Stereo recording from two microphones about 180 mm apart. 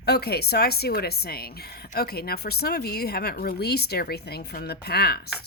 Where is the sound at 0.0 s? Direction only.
65° left (ahead or behind).